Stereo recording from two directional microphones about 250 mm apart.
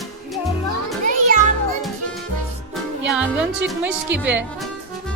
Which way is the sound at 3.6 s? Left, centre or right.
Centre.